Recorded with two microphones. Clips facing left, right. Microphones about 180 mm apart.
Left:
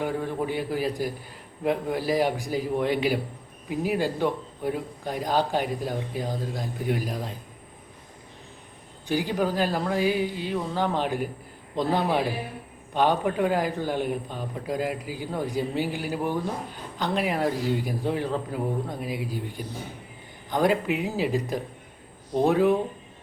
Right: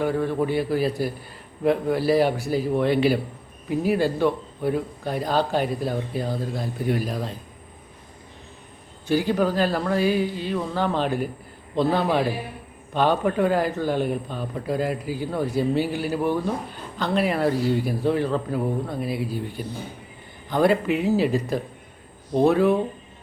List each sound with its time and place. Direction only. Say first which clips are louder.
0.0 s a man's voice: right 5 dB; 15° left (ahead or behind)
9.0 s a man's voice: right 4 dB; 15° left (ahead or behind)